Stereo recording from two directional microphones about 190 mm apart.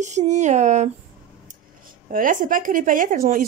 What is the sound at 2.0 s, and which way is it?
A woman's voice, 45° right (ahead or behind).